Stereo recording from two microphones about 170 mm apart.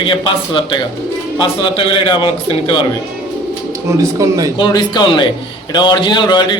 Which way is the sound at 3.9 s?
20° right (ahead or behind).